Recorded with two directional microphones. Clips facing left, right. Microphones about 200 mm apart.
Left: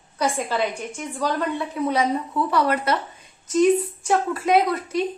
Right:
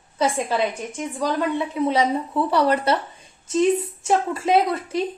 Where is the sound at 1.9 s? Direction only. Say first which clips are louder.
Even; 25° right (ahead or behind).